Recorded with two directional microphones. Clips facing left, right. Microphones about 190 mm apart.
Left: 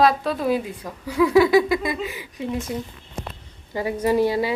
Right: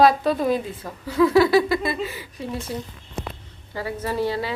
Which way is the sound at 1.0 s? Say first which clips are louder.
Even; 15° left (ahead or behind).